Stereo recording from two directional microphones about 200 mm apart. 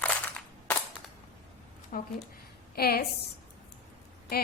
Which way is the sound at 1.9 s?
40° left (ahead or behind).